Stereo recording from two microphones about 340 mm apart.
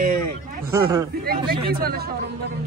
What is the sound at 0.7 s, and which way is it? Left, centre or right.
Speech, centre.